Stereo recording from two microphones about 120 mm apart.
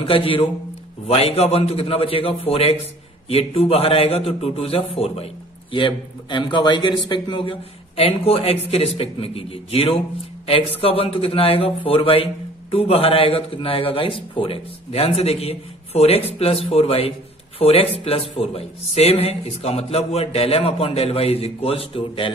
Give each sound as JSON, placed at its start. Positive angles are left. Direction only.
{"t": 0.0, "sound": "a man's voice", "side_deg": 50}